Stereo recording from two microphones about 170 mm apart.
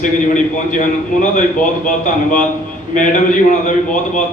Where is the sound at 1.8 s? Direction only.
50° left (ahead or behind).